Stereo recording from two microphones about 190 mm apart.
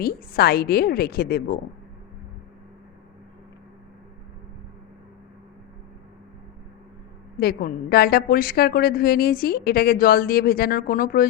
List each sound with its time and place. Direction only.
0.0 s a woman's voice: 50° left (ahead or behind)
7.3 s a woman's voice: 50° left (ahead or behind)